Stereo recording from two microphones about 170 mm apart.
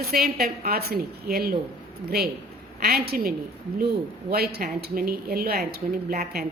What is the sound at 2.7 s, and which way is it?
A woman's voice, 65° right (ahead or behind).